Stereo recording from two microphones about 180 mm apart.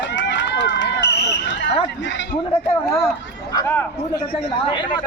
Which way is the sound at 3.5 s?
15° left (ahead or behind).